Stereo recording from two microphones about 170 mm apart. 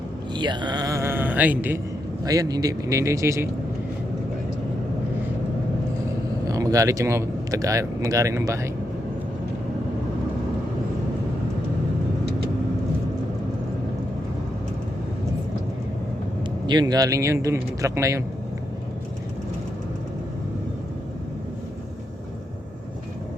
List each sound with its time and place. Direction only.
0.3 s speech: 25° right (ahead or behind); by 1.8 s 10° right (ahead or behind)
2.2 s a man's voice: 20° right (ahead or behind)
6.5 s speech: 20° right (ahead or behind)
16.6 s a man's voice: 25° right (ahead or behind)